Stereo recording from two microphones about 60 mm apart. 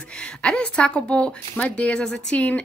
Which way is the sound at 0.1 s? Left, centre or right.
Centre.